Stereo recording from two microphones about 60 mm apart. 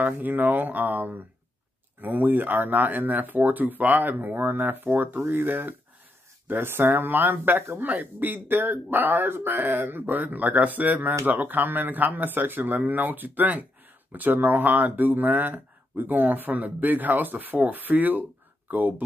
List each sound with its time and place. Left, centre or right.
0.0 s speech: right